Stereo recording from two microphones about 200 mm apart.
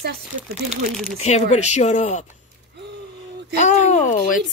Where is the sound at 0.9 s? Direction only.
Centre (ahead or behind).